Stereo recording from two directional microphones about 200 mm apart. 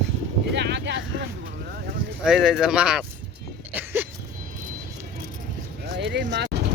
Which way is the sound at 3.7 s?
10° right (ahead or behind).